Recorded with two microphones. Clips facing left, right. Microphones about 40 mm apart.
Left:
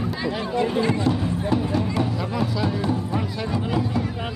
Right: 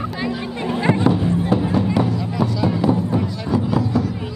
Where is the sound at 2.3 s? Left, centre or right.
Centre.